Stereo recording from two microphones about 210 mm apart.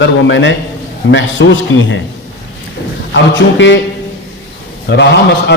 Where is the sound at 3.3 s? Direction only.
60° left (ahead or behind).